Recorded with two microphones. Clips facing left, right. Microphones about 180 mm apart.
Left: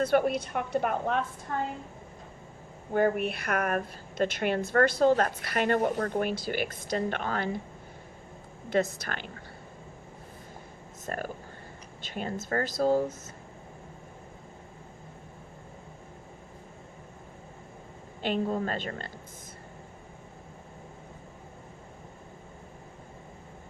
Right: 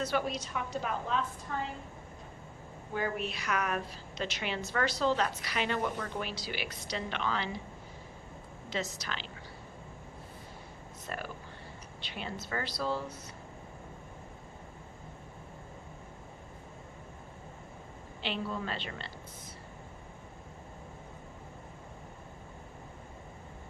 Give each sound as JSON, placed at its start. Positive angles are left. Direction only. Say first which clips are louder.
{"t": 0.0, "sound": "a woman's voice", "louder": "left 8 dB", "side_deg": 55}
{"t": 2.9, "sound": "a woman's voice", "louder": "left 9 dB", "side_deg": 55}
{"t": 8.7, "sound": "a woman's voice", "louder": "left 9 dB", "side_deg": 55}
{"t": 11.0, "sound": "a woman's voice", "louder": "left 6 dB", "side_deg": 45}
{"t": 18.2, "sound": "a woman's voice", "louder": "left 7 dB", "side_deg": 45}